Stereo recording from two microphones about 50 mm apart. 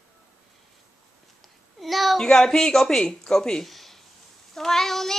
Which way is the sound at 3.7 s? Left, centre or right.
Centre.